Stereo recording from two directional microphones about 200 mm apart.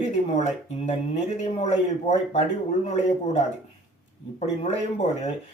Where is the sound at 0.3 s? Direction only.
35° left (ahead or behind).